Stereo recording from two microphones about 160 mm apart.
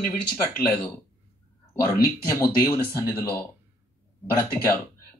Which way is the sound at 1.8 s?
20° left (ahead or behind).